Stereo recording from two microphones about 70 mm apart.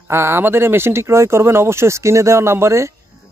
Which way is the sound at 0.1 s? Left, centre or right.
Right.